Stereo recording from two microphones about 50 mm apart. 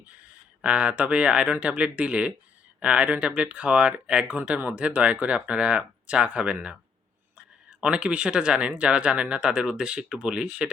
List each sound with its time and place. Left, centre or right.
0.1 s speech: right